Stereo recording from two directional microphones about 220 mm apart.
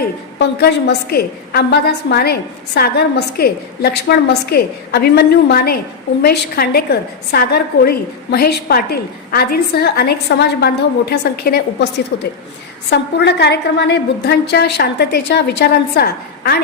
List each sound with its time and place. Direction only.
0.3 s a woman's voice: 50° left (ahead or behind)